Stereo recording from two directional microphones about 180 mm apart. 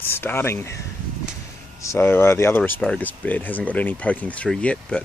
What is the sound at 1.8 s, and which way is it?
Speech, 15° left (ahead or behind).